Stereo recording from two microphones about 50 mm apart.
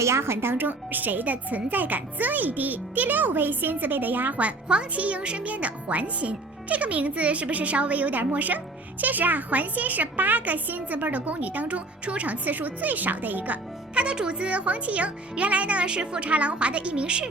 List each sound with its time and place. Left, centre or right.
0.0 s speech: right
0.5 s a child's voice: right
14.0 s speech: centre